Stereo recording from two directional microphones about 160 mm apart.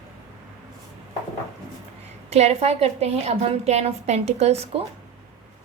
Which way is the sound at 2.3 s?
40° right (ahead or behind).